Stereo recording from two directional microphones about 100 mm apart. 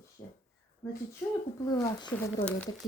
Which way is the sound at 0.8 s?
30° left (ahead or behind).